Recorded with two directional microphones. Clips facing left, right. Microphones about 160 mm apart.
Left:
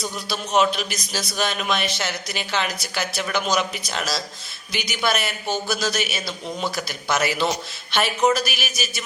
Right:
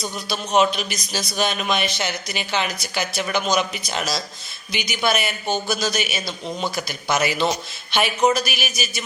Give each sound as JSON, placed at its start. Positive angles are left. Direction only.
{"t": 0.3, "sound": "a man's voice", "side_deg": 0}
{"t": 6.2, "sound": "speech", "side_deg": -20}
{"t": 6.8, "sound": "a man's voice", "side_deg": 0}